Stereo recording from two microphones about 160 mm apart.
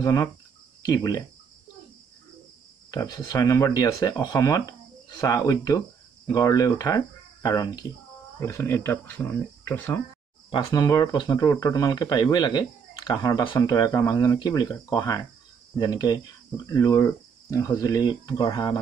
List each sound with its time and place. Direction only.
0.0 s speech: 20° left (ahead or behind)
2.9 s speech: 20° left (ahead or behind)
10.7 s speech: 25° left (ahead or behind)